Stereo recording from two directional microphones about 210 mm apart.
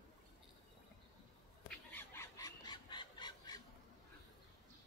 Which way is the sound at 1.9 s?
10° left (ahead or behind).